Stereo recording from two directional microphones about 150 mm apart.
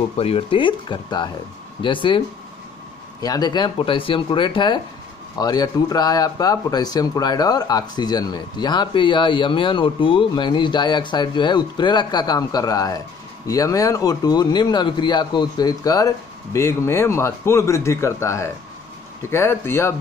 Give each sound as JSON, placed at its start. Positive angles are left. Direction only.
{"t": 0.2, "sound": "a man's voice", "side_deg": 40}